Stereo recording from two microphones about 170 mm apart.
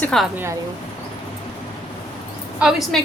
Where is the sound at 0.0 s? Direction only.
5° left (ahead or behind).